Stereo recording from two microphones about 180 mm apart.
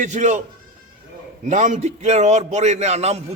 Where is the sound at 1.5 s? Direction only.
40° right (ahead or behind).